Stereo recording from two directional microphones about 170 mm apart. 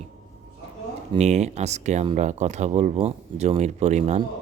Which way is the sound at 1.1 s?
40° right (ahead or behind).